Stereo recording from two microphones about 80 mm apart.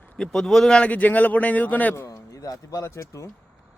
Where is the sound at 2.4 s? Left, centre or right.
Left.